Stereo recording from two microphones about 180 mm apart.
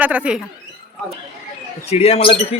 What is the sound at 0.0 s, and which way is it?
Speech, 5° right (ahead or behind).